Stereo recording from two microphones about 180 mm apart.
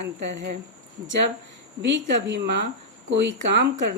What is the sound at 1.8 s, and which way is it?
Speech, 80° right.